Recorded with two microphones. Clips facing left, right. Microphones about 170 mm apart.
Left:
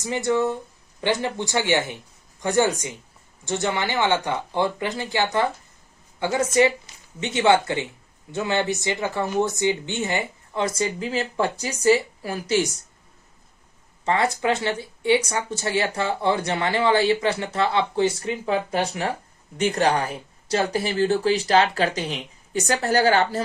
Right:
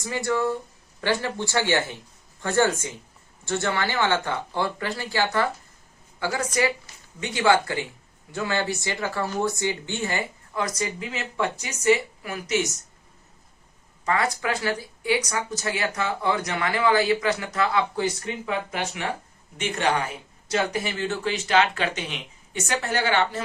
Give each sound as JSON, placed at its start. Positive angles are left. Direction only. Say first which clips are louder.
{"t": 0.0, "sound": "speech", "louder": "left 3 dB", "side_deg": 20}
{"t": 14.0, "sound": "speech", "louder": "left 3 dB", "side_deg": 25}